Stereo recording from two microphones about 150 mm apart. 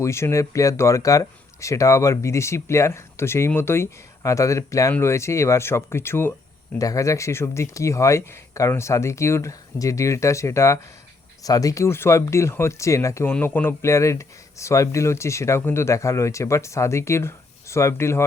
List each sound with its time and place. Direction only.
0.0 s speech: 20° left (ahead or behind)